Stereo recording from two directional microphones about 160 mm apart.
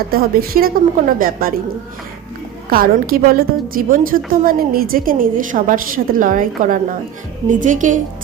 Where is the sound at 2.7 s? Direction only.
65° right (ahead or behind).